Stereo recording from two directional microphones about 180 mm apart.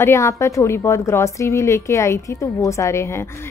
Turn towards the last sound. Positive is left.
turn(degrees=15)  # may be behind; listen again after turning